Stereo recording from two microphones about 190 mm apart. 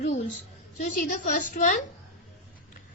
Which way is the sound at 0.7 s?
45° left (ahead or behind).